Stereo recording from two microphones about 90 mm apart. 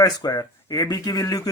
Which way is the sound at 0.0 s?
45° left (ahead or behind).